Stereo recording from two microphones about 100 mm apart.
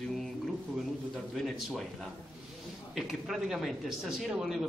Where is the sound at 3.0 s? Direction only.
Centre (ahead or behind).